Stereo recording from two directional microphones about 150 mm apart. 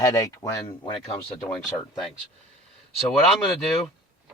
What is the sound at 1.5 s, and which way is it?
Speech, 5° left (ahead or behind).